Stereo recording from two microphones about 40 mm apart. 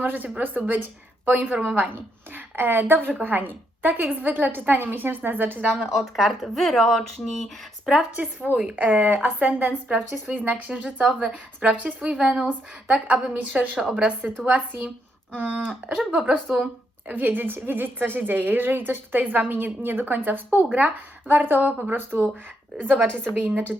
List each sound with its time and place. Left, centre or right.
0.0 s a woman's voice: right
3.2 s a woman's voice: right
5.8 s speech: centre
8.1 s a woman's voice: right
15.3 s speech: right
16.5 s speech: centre
17.1 s a woman's voice: right
21.6 s speech: right
21.9 s a woman's voice: right
22.8 s a woman's voice: right